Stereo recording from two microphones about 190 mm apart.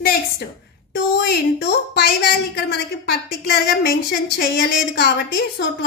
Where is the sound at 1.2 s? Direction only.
60° left (ahead or behind).